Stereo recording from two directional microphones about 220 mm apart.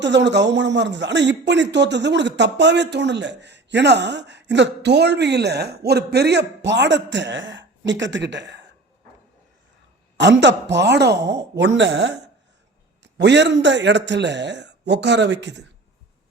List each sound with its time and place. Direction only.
0.0 s speech: 55° right (ahead or behind)
10.2 s speech: 55° right (ahead or behind)